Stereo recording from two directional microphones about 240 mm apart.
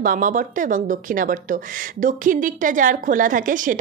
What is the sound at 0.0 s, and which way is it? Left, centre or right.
Speech, right.